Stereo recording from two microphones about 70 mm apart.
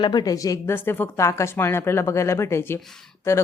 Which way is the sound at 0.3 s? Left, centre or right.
Left.